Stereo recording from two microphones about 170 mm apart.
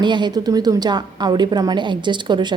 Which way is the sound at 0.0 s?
25° right (ahead or behind).